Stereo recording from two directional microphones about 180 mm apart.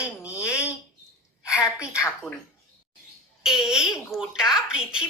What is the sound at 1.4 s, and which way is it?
Speech, 15° left (ahead or behind).